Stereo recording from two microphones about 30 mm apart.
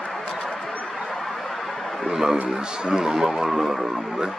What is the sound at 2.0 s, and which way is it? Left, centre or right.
Music, centre.